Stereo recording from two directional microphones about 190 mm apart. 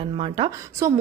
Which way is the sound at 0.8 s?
15° right (ahead or behind).